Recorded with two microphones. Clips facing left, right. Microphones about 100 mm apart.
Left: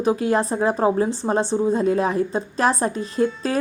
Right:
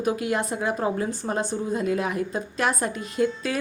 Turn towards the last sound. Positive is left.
turn(degrees=35)  # may be behind; listen again after turning